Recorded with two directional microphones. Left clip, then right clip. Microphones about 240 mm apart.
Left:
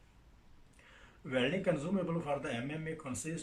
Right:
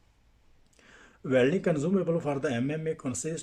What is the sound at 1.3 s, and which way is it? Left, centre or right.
Speech, right.